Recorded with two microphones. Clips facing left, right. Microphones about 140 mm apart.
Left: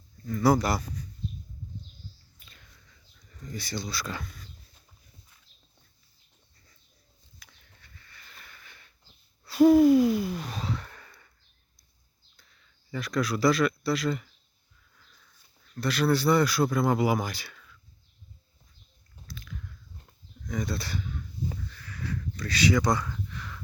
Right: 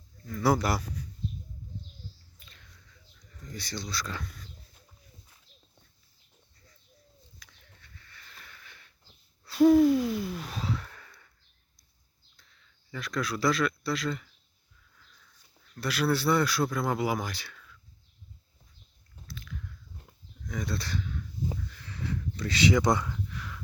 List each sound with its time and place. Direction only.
0.3 s speech: centre (ahead or behind)
2.4 s whispering: 5° left (ahead or behind)
3.5 s speech: 5° left (ahead or behind)
7.3 s a sound: 10° left (ahead or behind)
9.5 s owl: 5° left (ahead or behind)
12.9 s speech: centre (ahead or behind)
15.7 s speech: 5° right (ahead or behind)
19.3 s biting: centre (ahead or behind)
20.0 s livestock: 5° right (ahead or behind)
21.5 s sniff: 20° right (ahead or behind)
23.1 s a sound: 5° right (ahead or behind)